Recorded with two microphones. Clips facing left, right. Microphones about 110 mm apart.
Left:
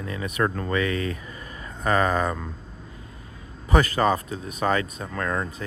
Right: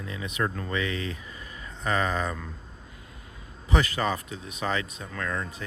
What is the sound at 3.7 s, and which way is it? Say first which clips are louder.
Speech: left 6 dB; 45° left (ahead or behind).